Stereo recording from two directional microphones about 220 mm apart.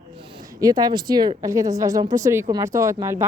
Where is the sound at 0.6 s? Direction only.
15° right (ahead or behind).